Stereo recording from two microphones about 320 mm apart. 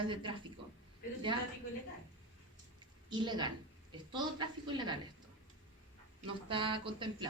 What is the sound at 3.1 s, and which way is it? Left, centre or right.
Speech, centre.